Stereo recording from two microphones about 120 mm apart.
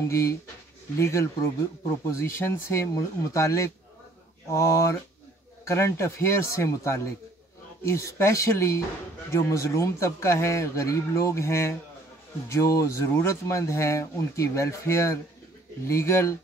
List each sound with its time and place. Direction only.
0.1 s speech: 25° left (ahead or behind)